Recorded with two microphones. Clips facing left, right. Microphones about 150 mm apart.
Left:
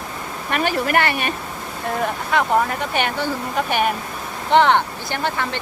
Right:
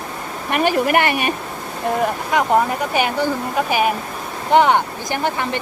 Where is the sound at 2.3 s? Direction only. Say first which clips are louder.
Right 2 dB; 15° right (ahead or behind).